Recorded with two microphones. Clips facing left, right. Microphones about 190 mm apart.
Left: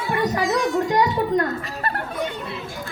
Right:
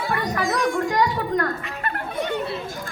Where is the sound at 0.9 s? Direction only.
20° left (ahead or behind).